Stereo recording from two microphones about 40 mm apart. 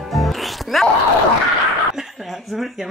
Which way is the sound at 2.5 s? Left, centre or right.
Centre.